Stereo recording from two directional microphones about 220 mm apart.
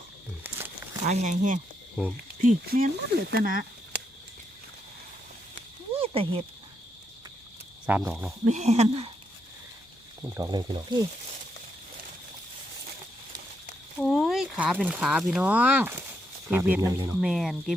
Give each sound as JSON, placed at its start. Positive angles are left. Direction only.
{"t": 1.0, "sound": "speech", "side_deg": -30}
{"t": 2.0, "sound": "speech", "side_deg": -5}
{"t": 2.4, "sound": "speech", "side_deg": -40}
{"t": 5.5, "sound": "a sound", "side_deg": -25}
{"t": 7.9, "sound": "speech", "side_deg": -5}
{"t": 8.4, "sound": "speech", "side_deg": -30}
{"t": 10.3, "sound": "speech", "side_deg": -15}
{"t": 14.0, "sound": "speech", "side_deg": 0}